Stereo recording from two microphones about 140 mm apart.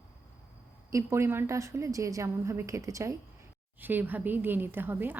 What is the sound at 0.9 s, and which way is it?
A woman's voice, 20° right (ahead or behind).